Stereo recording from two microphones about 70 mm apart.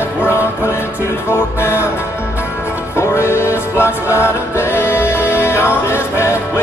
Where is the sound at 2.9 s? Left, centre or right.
Left.